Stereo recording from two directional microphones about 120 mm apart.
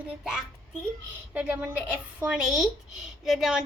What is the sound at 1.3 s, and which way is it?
A woman's voice, 10° right (ahead or behind).